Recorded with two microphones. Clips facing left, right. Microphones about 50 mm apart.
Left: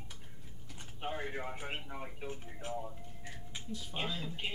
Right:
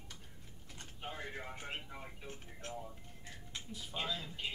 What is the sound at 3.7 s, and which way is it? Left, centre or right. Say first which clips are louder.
Speech: left 4 dB; centre.